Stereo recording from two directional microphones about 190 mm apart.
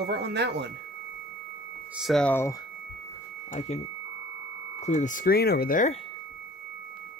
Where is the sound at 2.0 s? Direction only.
Centre (ahead or behind).